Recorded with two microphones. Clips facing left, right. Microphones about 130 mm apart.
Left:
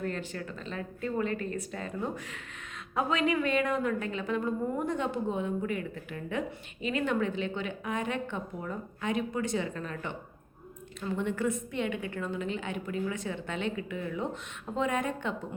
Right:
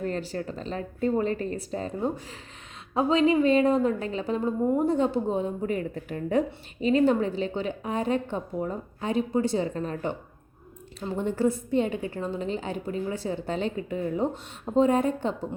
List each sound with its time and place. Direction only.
0.0 s a woman's voice: 35° right (ahead or behind)